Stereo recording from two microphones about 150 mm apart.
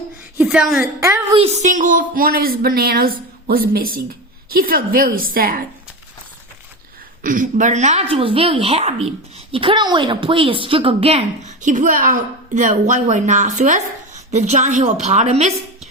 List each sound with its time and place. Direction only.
0.4 s a woman's voice: centre (ahead or behind)
0.8 s a woman's voice: 20° right (ahead or behind)
1.3 s a woman's voice: 40° right (ahead or behind); by 5.6 s 75° right (ahead or behind)
7.2 s a woman's voice: 60° right (ahead or behind)
8.1 s a woman's voice: 40° right (ahead or behind)
11.6 s a woman's voice: 60° right (ahead or behind)